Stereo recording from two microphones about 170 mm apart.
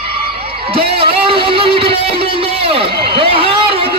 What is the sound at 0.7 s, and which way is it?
Music, 35° right (ahead or behind).